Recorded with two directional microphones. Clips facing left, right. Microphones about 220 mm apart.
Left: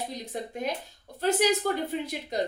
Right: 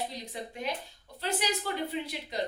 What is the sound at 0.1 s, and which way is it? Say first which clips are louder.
Speech: left 5 dB; 45° left (ahead or behind).